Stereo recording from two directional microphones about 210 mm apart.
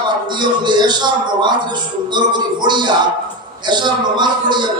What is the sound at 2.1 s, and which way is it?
A man's voice, 20° right (ahead or behind).